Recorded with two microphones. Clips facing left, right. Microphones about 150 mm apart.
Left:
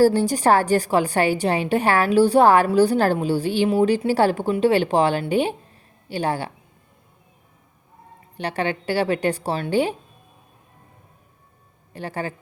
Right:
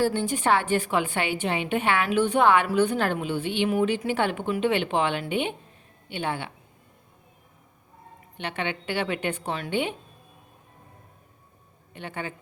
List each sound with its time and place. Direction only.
0.0 s a woman's voice: 35° left (ahead or behind)
8.4 s a woman's voice: 40° left (ahead or behind)
11.9 s a woman's voice: 40° left (ahead or behind)